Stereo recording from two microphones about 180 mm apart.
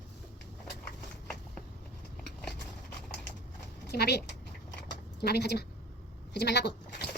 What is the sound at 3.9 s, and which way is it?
Speech, 65° left (ahead or behind).